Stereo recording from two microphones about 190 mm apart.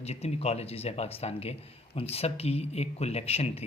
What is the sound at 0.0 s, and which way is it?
Speech, 35° left (ahead or behind).